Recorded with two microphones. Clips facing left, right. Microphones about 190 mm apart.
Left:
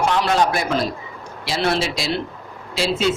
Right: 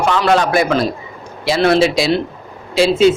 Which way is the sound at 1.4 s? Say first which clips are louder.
Right 8 dB; 65° right (ahead or behind).